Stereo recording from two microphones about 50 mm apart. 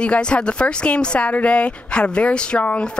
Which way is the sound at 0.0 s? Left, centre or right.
Left.